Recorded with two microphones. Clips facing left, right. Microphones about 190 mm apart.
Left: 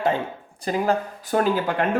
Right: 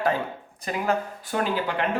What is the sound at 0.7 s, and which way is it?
Speech, 40° left (ahead or behind).